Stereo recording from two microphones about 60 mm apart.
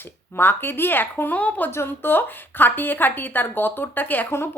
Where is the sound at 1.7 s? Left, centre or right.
Left.